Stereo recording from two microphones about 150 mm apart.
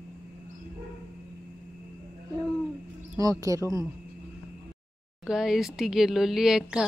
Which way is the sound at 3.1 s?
20° right (ahead or behind).